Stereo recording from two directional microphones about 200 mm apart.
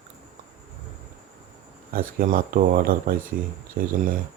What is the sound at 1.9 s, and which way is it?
Speech, 45° right (ahead or behind).